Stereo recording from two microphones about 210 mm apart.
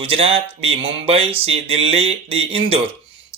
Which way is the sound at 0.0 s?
25° right (ahead or behind).